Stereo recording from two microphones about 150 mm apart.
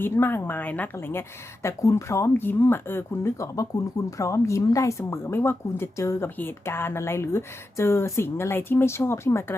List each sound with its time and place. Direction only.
0.0 s a woman's voice: 15° left (ahead or behind)